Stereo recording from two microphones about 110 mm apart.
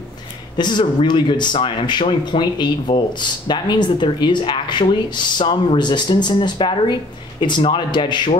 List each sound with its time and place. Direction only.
0.6 s speech: 45° left (ahead or behind)